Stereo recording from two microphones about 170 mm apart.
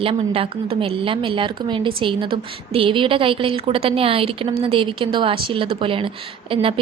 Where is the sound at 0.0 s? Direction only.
35° right (ahead or behind).